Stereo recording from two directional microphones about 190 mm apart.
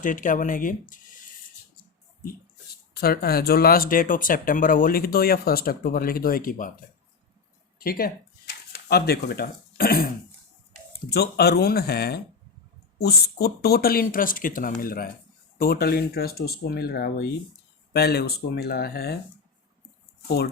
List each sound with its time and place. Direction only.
0.0 s speech: 45° left (ahead or behind)
2.9 s speech: 55° left (ahead or behind)
7.8 s speech: 50° left (ahead or behind)
11.1 s speech: 60° left (ahead or behind)
20.2 s speech: 55° left (ahead or behind)